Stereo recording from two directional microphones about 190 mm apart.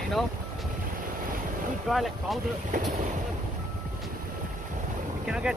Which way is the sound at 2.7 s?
45° right (ahead or behind).